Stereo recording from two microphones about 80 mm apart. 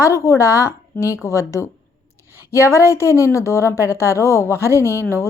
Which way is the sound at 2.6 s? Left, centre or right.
Left.